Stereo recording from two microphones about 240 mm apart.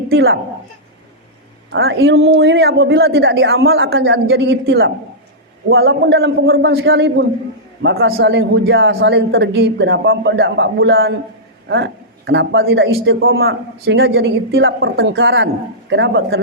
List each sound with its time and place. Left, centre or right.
0.1 s speech: right
1.7 s a man's voice: right